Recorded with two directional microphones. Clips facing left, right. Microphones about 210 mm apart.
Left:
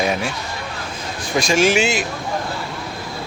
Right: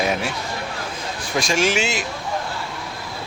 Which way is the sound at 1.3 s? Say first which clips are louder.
Left 4 dB; centre (ahead or behind).